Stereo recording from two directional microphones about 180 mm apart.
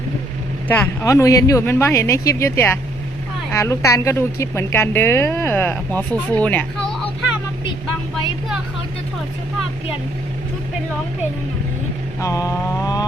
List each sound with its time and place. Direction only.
0.7 s a woman's voice: 15° left (ahead or behind)
12.2 s a woman's voice: 20° left (ahead or behind)